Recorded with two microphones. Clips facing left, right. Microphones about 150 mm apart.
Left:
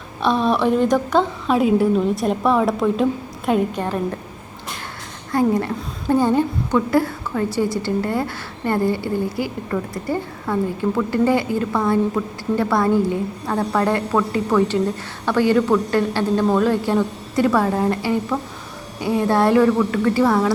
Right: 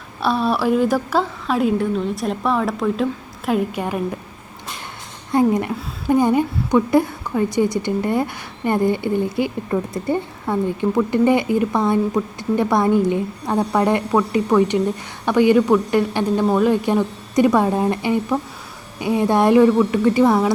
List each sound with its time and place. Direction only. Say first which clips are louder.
0.2 s a woman's voice: left 1 dB; 5° right (ahead or behind)
5.3 s a woman's voice: right 1 dB; 20° right (ahead or behind)